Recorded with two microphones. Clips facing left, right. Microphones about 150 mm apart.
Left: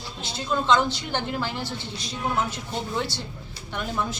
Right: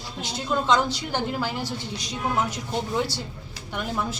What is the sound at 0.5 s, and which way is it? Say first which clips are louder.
A man's voice: even; 5° right (ahead or behind).